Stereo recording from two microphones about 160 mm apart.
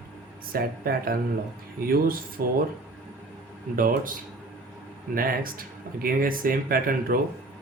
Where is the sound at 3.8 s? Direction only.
60° right (ahead or behind).